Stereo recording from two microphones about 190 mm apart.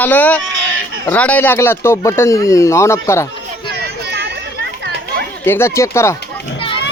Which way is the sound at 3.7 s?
60° right (ahead or behind).